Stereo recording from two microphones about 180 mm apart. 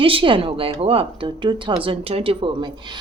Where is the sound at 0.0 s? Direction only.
30° right (ahead or behind).